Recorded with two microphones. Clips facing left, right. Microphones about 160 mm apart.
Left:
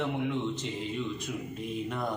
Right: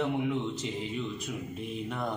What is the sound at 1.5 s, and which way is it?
Mantra, centre (ahead or behind).